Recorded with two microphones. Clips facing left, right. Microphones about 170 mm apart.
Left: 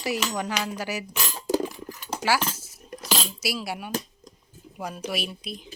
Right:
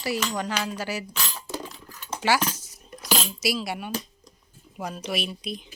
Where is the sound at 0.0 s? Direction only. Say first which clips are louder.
Even; 15° left (ahead or behind).